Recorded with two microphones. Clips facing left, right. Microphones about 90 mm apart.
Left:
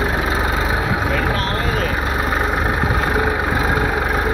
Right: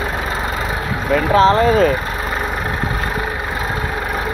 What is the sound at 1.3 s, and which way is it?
Speech, 25° right (ahead or behind).